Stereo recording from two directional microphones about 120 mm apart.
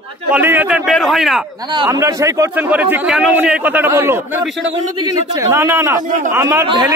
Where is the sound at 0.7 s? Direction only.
Centre (ahead or behind).